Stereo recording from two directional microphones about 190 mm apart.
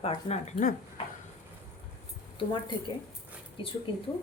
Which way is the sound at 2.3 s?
25° left (ahead or behind).